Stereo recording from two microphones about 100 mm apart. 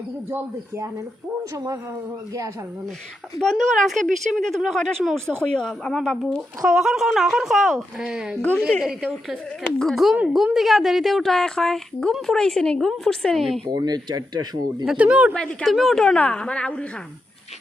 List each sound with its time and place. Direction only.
0.3 s speech: 30° right (ahead or behind)
3.4 s a woman's voice: centre (ahead or behind)
8.4 s a woman's voice: 15° left (ahead or behind)
8.8 s a woman's voice: 5° right (ahead or behind)
13.7 s speech: 45° right (ahead or behind)
14.8 s speech: 10° right (ahead or behind)
15.6 s a woman's voice: centre (ahead or behind)